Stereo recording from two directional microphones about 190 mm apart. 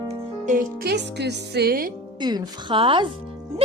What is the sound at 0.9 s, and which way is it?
Speech, 60° right (ahead or behind).